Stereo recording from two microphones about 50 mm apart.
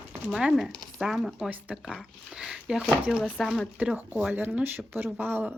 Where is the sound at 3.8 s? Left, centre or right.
Right.